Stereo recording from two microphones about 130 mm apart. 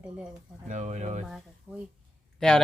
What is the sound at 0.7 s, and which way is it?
Speech, 65° right (ahead or behind).